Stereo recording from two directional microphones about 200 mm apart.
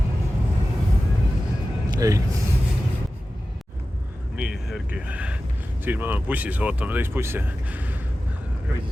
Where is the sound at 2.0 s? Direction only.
15° right (ahead or behind).